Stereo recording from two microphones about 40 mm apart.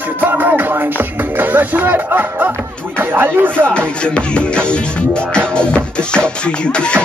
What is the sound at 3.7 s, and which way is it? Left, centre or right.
Speech, left.